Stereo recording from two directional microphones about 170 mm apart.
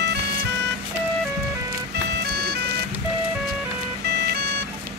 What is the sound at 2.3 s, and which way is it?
Ice cream truck, 75° right (ahead or behind).